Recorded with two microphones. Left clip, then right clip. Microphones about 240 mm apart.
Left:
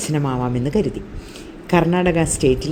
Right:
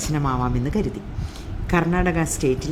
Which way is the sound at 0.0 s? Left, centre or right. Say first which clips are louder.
Left 2 dB; centre.